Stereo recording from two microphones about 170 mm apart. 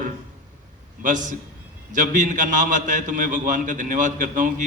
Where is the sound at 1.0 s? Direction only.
50° right (ahead or behind).